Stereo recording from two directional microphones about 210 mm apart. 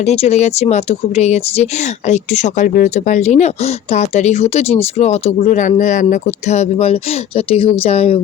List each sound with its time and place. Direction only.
0.0 s speech: 30° left (ahead or behind)